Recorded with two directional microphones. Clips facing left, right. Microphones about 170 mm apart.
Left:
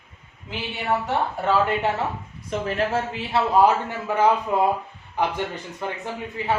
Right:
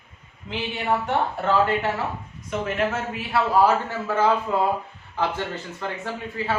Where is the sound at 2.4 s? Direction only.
30° left (ahead or behind).